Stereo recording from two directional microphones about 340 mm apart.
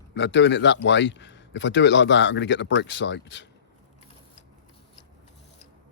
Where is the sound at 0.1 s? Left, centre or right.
Left.